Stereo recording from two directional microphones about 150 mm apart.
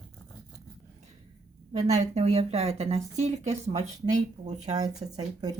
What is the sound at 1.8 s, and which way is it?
A woman's voice, 50° right (ahead or behind).